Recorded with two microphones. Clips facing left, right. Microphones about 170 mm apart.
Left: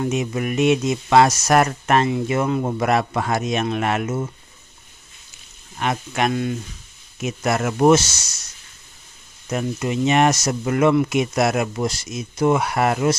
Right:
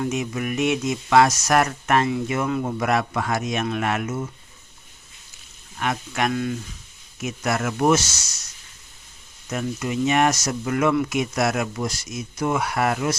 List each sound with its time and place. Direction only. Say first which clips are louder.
0.0 s speech: left 3 dB; 25° left (ahead or behind)
5.7 s speech: left 3 dB; 25° left (ahead or behind)
9.5 s speech: left 3 dB; 25° left (ahead or behind)